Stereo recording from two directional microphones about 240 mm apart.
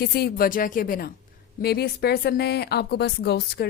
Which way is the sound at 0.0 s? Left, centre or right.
Left.